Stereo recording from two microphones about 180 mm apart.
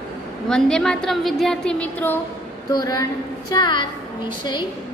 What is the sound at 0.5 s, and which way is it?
A woman's voice, 5° left (ahead or behind).